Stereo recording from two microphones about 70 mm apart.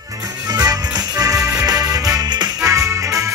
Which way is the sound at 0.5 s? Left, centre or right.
Right.